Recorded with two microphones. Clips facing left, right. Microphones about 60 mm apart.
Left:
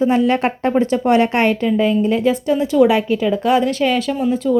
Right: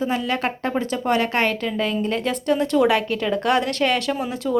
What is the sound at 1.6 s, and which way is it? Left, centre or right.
Speech, centre.